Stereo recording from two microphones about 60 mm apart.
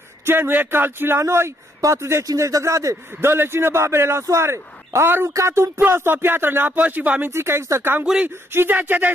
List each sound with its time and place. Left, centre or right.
0.2 s speech: right
2.2 s speech: right
3.2 s speech: right
7.2 s speech: right
8.5 s speech: right